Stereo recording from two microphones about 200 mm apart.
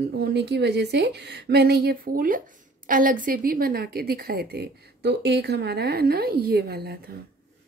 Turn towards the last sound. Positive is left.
turn(degrees=-50)  # may be behind; listen again after turning